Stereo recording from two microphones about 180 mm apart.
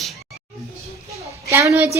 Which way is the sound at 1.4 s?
15° right (ahead or behind).